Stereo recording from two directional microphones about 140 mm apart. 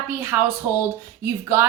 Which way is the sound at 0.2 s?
15° right (ahead or behind).